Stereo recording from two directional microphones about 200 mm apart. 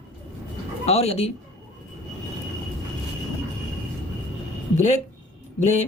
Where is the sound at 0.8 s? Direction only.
30° left (ahead or behind).